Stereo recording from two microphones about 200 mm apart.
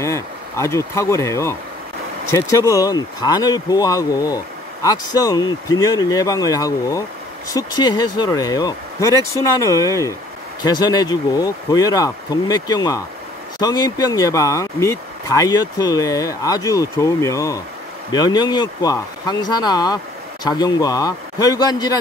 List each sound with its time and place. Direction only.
0.0 s speech: 15° left (ahead or behind)